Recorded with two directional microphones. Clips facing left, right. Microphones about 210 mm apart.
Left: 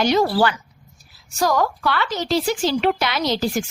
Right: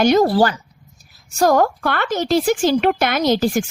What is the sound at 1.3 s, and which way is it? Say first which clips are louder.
A woman's voice: right 5 dB; 50° right (ahead or behind).